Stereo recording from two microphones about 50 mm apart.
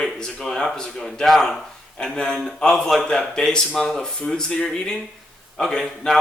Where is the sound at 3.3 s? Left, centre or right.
Centre.